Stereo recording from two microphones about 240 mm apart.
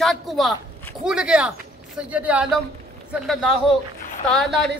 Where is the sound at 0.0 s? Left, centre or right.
Centre.